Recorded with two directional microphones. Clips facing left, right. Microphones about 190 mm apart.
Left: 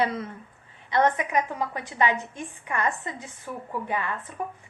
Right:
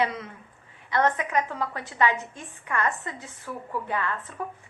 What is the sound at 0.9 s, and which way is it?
A woman's voice, 15° left (ahead or behind).